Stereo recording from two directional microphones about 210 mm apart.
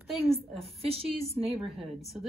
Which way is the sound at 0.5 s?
30° right (ahead or behind).